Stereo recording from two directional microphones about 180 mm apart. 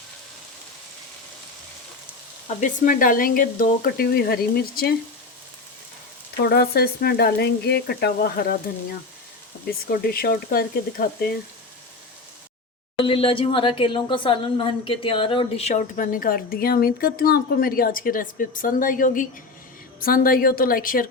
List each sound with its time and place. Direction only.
2.6 s a woman's voice: 50° left (ahead or behind)
6.3 s speech: 65° left (ahead or behind)
9.6 s speech: 55° left (ahead or behind)
13.1 s a woman's voice: 30° left (ahead or behind); by 21.1 s 50° left (ahead or behind)